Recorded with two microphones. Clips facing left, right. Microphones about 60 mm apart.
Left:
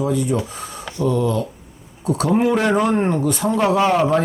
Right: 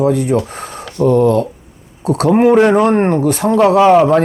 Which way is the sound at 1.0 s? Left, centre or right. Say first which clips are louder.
Right 8 dB; right.